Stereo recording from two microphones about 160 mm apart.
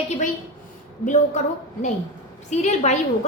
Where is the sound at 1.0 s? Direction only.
50° left (ahead or behind).